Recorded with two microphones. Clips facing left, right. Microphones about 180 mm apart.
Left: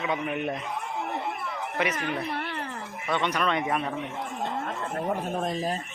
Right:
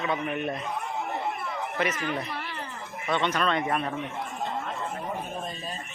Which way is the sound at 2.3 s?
60° left (ahead or behind).